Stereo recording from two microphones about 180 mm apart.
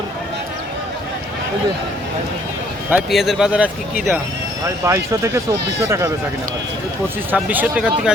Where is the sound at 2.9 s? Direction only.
Centre (ahead or behind).